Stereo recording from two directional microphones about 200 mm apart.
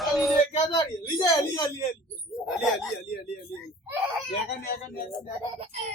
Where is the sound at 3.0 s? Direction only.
55° left (ahead or behind).